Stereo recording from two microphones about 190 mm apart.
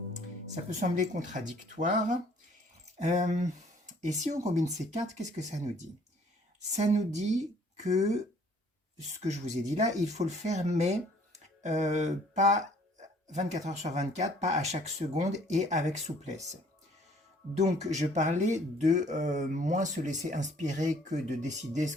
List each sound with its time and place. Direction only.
0.5 s speech: 40° right (ahead or behind)
2.8 s a sound: 40° right (ahead or behind)
4.2 s speech: 40° right (ahead or behind)
9.2 s speech: 35° right (ahead or behind)
17.6 s speech: 35° right (ahead or behind)